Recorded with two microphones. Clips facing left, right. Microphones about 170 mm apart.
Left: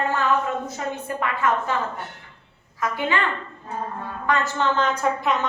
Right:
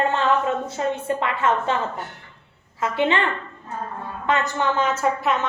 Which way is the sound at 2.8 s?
25° right (ahead or behind).